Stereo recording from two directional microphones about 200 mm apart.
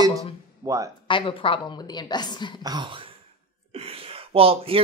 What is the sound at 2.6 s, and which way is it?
Speech, 20° right (ahead or behind).